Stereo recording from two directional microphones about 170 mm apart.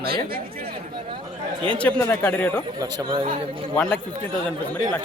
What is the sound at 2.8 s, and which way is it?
Speech, 25° right (ahead or behind).